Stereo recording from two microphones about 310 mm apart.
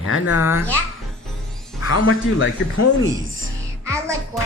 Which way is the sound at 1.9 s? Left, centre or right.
Left.